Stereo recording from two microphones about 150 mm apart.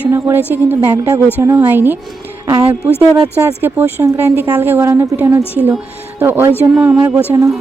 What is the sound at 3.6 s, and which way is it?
A woman's voice, 15° right (ahead or behind).